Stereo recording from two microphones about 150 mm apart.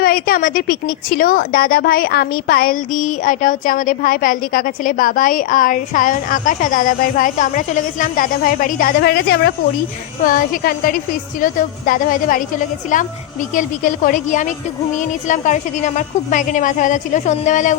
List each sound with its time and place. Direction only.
0.0 s a woman's voice: 75° left (ahead or behind); by 9.5 s 90° left
10.2 s a woman's voice: 70° left (ahead or behind)